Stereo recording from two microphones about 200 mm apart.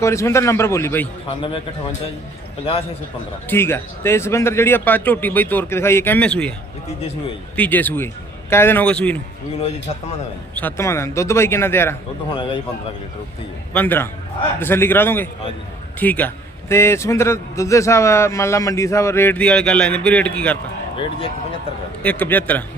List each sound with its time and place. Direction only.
0.0 s a man's voice: 15° left (ahead or behind)
1.3 s speech: 25° left (ahead or behind)
3.5 s a man's voice: 10° left (ahead or behind)
7.5 s a man's voice: 10° left (ahead or behind)
10.5 s a man's voice: 10° left (ahead or behind)
12.3 s speech: 25° left (ahead or behind)
13.7 s a man's voice: 10° left (ahead or behind)
22.0 s a man's voice: 10° left (ahead or behind)